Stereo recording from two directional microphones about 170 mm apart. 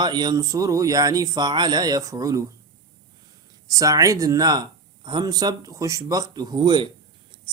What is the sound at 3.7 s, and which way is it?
Speech, 20° right (ahead or behind).